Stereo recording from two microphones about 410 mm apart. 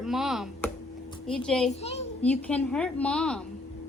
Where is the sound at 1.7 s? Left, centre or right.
Centre.